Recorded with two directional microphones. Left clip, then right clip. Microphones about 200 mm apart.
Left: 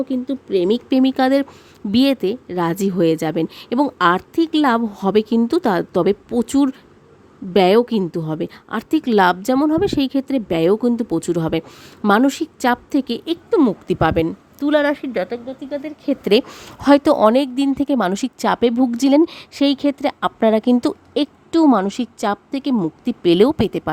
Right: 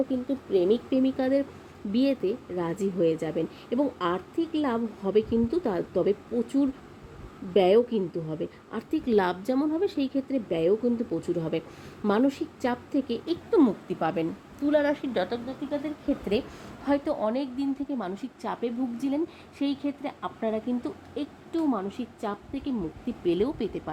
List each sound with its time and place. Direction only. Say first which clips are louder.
0.1 s a woman's voice: left 6 dB; 60° left (ahead or behind)